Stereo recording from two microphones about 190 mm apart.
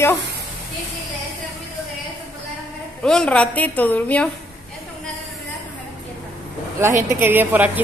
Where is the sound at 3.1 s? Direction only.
5° left (ahead or behind).